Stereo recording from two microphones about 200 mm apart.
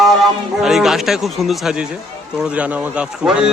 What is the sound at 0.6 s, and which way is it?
Speech, centre (ahead or behind).